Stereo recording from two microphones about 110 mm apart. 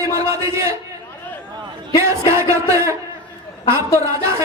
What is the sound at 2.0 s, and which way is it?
Speech, 25° right (ahead or behind).